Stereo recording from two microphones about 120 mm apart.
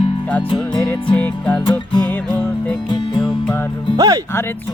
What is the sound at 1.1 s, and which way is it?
Music, 15° left (ahead or behind).